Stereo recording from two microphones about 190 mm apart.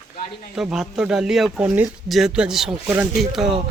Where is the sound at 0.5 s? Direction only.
5° right (ahead or behind).